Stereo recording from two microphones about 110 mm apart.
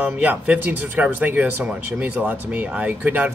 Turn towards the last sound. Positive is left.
turn(degrees=-15)  # may be behind; listen again after turning